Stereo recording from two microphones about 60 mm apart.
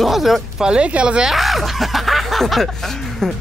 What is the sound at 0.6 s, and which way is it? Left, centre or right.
Speech, centre.